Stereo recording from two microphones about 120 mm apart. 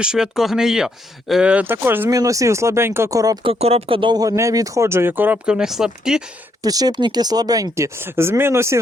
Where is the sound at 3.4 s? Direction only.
55° right (ahead or behind).